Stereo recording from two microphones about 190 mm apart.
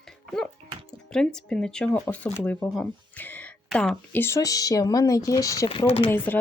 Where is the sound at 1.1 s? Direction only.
5° left (ahead or behind).